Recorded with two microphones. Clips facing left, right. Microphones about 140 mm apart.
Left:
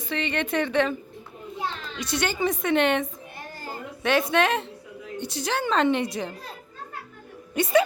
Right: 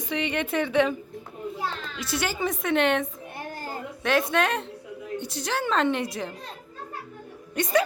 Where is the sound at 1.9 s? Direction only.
5° right (ahead or behind).